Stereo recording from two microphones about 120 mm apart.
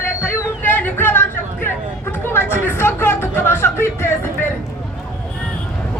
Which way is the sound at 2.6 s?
20° left (ahead or behind).